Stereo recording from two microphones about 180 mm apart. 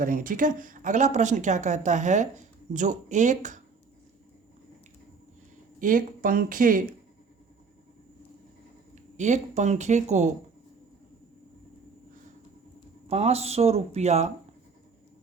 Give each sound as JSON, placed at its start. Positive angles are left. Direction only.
{"t": 0.0, "sound": "a woman's voice", "side_deg": -50}
{"t": 5.8, "sound": "speech", "side_deg": -50}
{"t": 9.1, "sound": "a woman's voice", "side_deg": -40}
{"t": 13.1, "sound": "a woman's voice", "side_deg": -35}